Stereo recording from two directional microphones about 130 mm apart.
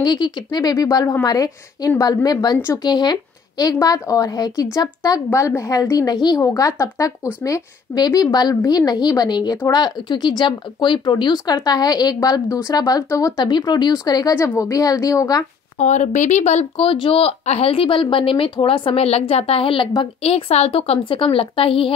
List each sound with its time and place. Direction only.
0.0 s speech: 35° left (ahead or behind)
15.8 s speech: 65° left (ahead or behind)
16.8 s a woman's voice: 45° left (ahead or behind)